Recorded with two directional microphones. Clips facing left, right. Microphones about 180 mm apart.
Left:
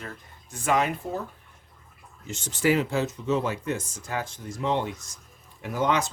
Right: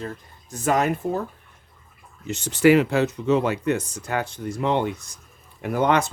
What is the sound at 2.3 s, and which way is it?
Speech, 65° right (ahead or behind).